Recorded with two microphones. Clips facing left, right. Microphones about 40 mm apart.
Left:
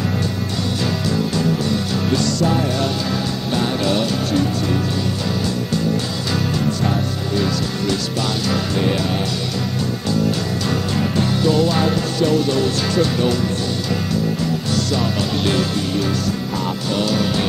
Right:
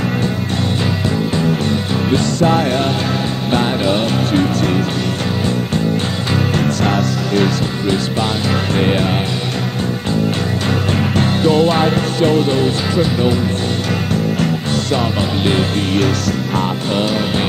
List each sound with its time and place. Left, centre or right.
2.5 s music: right
3.8 s music: right
6.6 s music: right
8.7 s music: right
11.1 s music: right
12.9 s speech: centre
14.4 s music: right